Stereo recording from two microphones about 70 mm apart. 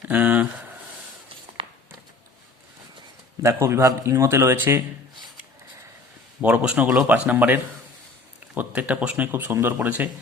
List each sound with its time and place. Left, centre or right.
0.1 s speech: right
3.4 s a man's voice: right
6.4 s speech: centre